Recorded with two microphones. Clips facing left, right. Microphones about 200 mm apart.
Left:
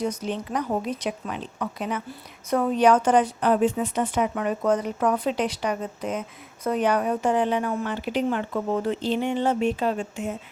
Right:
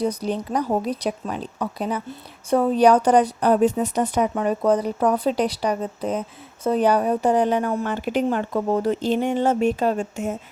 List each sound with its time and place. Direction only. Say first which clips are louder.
0.0 s a woman's voice: right 4 dB; 35° right (ahead or behind)